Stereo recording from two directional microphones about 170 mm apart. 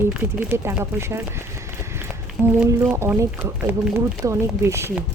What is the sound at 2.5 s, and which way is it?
Speech, 10° right (ahead or behind).